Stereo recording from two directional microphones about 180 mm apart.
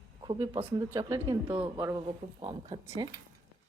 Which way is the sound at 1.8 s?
20° right (ahead or behind).